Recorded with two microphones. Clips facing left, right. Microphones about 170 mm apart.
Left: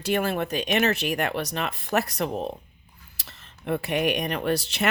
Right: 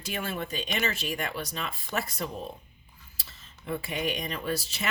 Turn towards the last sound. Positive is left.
turn(degrees=70)  # may be behind; listen again after turning